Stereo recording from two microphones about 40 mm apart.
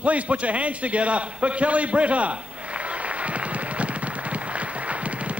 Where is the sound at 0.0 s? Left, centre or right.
Right.